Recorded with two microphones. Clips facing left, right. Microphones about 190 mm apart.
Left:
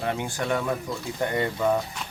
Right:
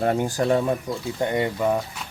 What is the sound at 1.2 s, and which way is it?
Speech, 20° right (ahead or behind).